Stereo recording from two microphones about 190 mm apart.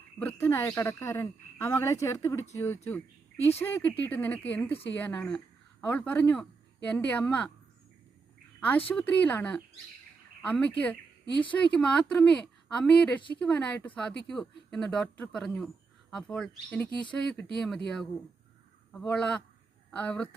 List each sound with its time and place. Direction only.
0.2 s speech: 10° left (ahead or behind)
8.9 s speech: 10° left (ahead or behind)